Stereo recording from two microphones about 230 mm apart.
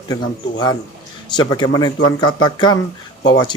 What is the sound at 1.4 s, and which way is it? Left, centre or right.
Speech, centre.